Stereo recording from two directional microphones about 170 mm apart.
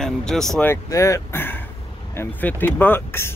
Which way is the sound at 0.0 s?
5° left (ahead or behind).